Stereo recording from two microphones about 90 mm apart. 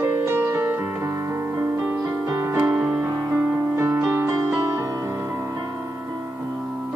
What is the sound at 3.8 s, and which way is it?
Music, 25° right (ahead or behind).